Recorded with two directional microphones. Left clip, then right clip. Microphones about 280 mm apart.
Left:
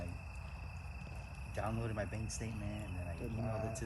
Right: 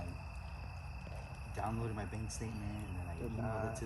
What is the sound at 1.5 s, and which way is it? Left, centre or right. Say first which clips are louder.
Speech: even; centre.